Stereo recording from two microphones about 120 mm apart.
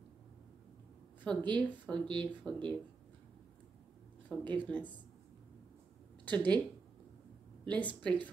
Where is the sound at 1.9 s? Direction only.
10° left (ahead or behind).